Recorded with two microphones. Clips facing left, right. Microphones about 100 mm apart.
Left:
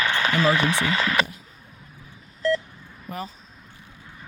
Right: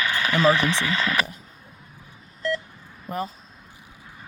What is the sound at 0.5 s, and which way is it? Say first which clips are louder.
Speech: left 1 dB; 25° left (ahead or behind).